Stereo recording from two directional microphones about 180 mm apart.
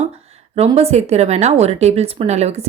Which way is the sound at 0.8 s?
35° right (ahead or behind).